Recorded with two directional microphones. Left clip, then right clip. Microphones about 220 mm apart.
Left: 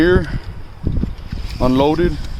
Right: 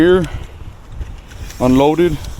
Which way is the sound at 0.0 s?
5° right (ahead or behind).